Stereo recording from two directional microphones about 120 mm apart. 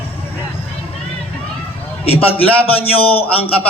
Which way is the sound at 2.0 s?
55° left (ahead or behind).